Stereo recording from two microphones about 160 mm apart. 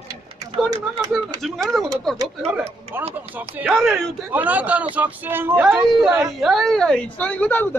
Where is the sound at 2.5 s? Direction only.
15° right (ahead or behind).